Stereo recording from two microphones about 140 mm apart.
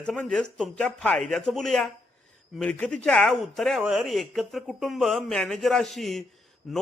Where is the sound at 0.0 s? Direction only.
5° left (ahead or behind).